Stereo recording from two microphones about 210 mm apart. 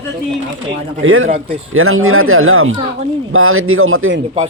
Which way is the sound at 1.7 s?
80° right.